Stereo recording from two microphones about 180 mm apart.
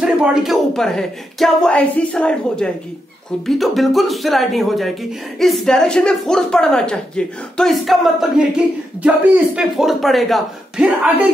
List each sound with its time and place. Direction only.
0.0 s a woman's voice: 5° right (ahead or behind)